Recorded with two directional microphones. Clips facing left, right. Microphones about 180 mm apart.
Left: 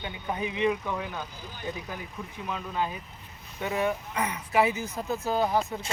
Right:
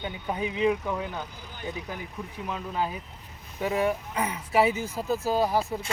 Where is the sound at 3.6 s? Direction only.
30° right (ahead or behind).